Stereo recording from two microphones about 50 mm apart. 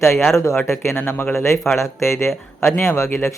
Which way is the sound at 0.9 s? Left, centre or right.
Left.